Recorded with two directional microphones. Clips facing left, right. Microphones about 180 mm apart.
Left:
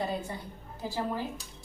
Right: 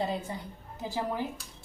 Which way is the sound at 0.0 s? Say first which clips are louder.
Right 1 dB; 20° right (ahead or behind).